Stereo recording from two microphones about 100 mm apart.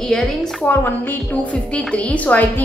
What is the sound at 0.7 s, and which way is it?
A woman's voice, 15° left (ahead or behind).